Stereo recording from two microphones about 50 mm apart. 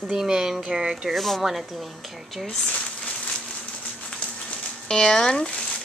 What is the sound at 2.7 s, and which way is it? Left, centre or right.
Crumpling, left.